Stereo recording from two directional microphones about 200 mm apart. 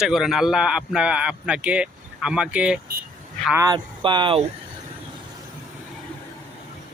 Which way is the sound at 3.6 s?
20° right (ahead or behind).